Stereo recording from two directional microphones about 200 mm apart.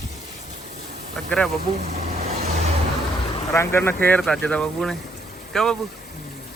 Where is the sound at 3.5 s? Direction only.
10° left (ahead or behind).